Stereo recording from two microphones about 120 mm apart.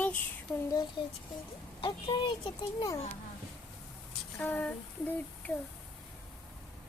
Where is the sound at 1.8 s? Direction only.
40° left (ahead or behind).